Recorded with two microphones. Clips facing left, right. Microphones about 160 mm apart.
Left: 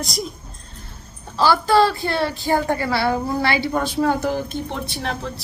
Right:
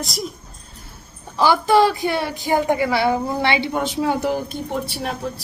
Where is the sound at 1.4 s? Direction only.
15° right (ahead or behind).